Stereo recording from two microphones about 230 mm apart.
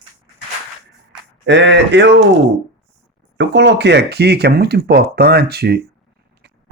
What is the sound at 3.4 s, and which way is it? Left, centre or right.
Speech, right.